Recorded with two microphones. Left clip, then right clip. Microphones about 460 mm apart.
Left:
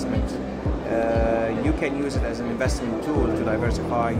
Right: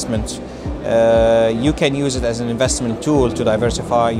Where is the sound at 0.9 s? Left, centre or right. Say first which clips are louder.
Right 10 dB; right.